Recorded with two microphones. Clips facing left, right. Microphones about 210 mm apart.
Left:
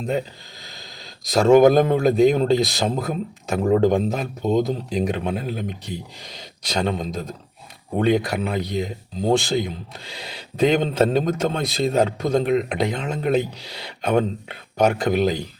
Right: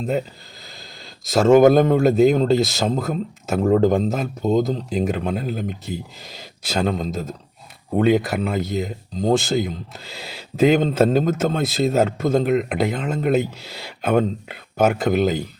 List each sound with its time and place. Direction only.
0.0 s speech: 5° right (ahead or behind)